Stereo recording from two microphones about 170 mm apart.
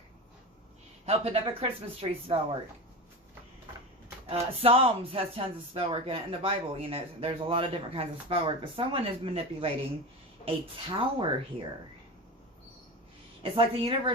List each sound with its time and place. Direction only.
1.0 s speech: 35° right (ahead or behind)
4.6 s a woman's voice: 35° right (ahead or behind)
13.4 s speech: 30° right (ahead or behind)